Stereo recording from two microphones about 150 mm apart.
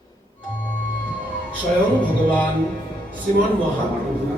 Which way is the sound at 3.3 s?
55° right (ahead or behind).